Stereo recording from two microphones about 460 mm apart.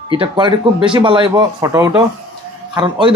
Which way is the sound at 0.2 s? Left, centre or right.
Centre.